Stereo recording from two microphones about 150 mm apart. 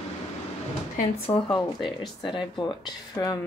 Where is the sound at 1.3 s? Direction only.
35° left (ahead or behind).